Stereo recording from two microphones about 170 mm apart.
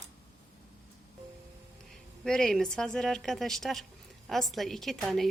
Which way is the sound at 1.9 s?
5° left (ahead or behind).